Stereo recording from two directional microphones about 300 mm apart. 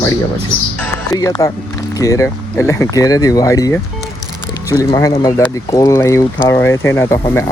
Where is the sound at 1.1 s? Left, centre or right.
Centre.